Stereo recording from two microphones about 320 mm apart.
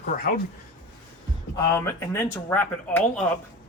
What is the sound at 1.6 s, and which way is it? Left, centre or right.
Speech, centre.